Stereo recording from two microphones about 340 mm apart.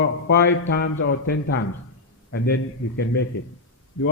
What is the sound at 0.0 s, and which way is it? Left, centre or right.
A man's voice, left.